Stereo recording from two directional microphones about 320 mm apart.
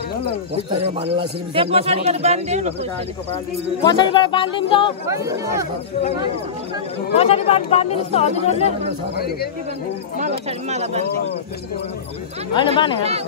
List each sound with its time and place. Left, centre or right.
0.8 s speech: centre
3.8 s speech: centre
5.0 s speech: centre
7.2 s speech: centre
10.1 s speech: right
12.5 s speech: centre